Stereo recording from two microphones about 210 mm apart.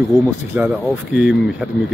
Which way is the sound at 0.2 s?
5° right (ahead or behind).